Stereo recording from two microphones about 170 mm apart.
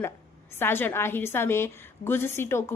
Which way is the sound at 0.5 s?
15° left (ahead or behind).